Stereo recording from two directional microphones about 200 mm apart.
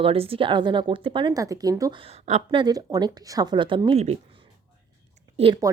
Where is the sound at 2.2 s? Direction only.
30° right (ahead or behind).